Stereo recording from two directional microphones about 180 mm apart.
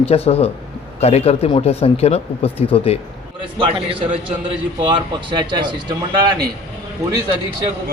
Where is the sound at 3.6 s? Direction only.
30° right (ahead or behind).